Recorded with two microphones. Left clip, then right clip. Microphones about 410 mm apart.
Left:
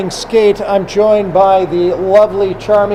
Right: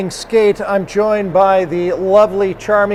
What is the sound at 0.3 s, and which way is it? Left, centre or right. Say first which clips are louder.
A man's voice: left 2 dB; right.